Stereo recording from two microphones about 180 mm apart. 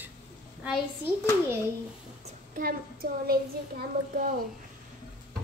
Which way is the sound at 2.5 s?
55° right (ahead or behind).